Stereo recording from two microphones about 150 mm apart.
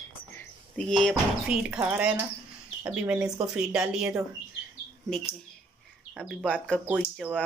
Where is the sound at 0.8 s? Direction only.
5° left (ahead or behind).